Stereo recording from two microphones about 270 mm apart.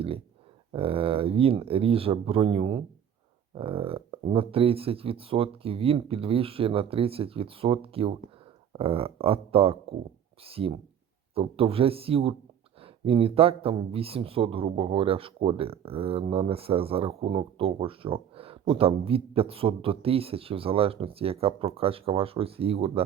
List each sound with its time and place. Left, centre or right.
0.7 s speech: right